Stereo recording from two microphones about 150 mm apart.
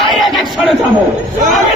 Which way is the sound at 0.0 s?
Centre (ahead or behind).